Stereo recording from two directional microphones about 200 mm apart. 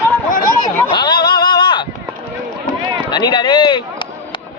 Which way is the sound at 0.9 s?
20° left (ahead or behind).